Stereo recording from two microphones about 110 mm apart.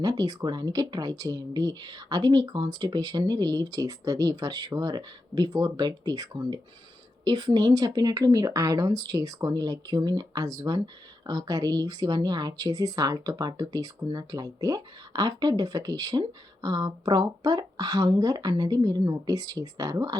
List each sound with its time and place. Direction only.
0.0 s a woman's voice: 35° right (ahead or behind)